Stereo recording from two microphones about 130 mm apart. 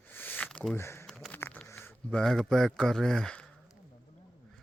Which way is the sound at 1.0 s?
Centre (ahead or behind).